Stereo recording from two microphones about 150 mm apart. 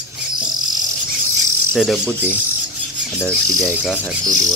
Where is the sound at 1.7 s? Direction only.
Centre (ahead or behind).